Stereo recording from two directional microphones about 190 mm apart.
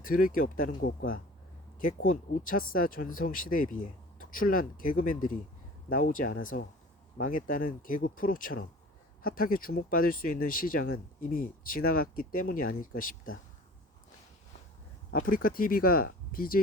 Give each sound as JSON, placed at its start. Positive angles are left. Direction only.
{"t": 0.0, "sound": "speech", "side_deg": 45}
{"t": 15.1, "sound": "speech", "side_deg": 50}